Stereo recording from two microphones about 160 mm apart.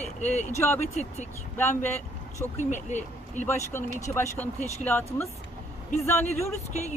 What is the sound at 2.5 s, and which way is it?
Speech, 50° left (ahead or behind).